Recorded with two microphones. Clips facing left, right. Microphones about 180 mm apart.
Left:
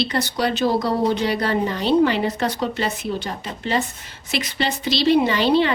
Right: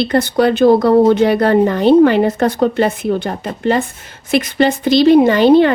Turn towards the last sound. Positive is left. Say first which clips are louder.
# right 9 dB
turn(degrees=-50)  # may be behind; listen again after turning